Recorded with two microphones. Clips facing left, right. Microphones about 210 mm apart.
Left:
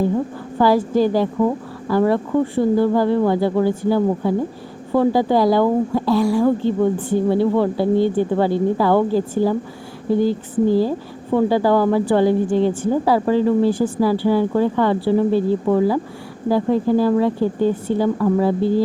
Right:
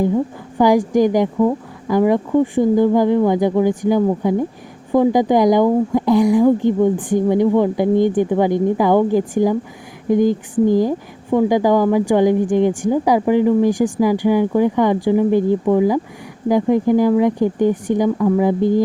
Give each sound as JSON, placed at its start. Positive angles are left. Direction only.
{"t": 0.6, "sound": "speech", "side_deg": -15}